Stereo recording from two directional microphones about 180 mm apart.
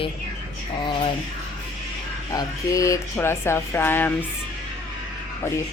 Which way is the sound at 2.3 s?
20° left (ahead or behind).